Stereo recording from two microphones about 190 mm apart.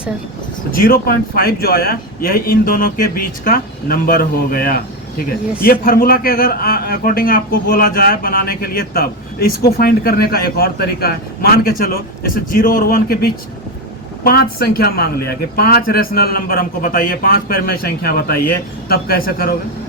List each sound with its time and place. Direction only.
0.7 s a man's voice: 50° left (ahead or behind)